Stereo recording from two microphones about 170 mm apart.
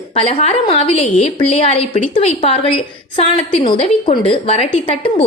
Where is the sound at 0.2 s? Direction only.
35° left (ahead or behind).